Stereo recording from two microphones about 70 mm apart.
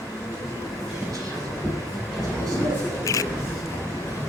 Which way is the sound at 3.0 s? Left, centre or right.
Left.